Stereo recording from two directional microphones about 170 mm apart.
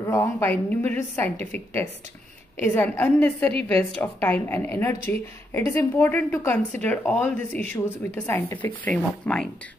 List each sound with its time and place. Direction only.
0.0 s a woman's voice: 15° left (ahead or behind)